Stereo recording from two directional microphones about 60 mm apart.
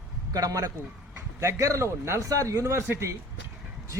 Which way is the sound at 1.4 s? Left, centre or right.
Right.